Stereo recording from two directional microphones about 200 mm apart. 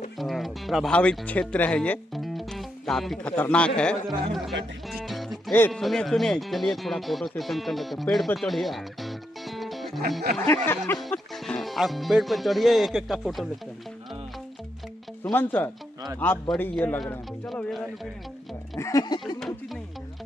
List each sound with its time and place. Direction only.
0.2 s speech: centre (ahead or behind)
4.9 s music: centre (ahead or behind)
5.7 s speech: centre (ahead or behind)
8.4 s music: centre (ahead or behind)
10.5 s a man's voice: 10° left (ahead or behind)
15.2 s a man's voice: 10° left (ahead or behind)
18.8 s speech: 15° left (ahead or behind)